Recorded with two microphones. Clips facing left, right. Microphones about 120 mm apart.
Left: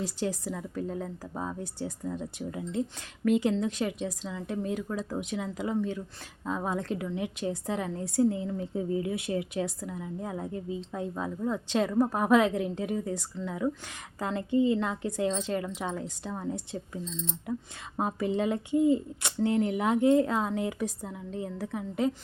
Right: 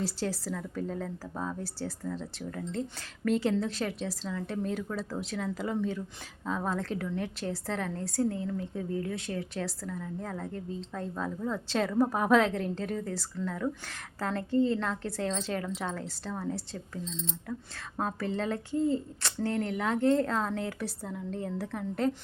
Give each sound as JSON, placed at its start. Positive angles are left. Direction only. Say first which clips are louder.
{"t": 0.5, "sound": "speech", "louder": "left 1 dB", "side_deg": 5}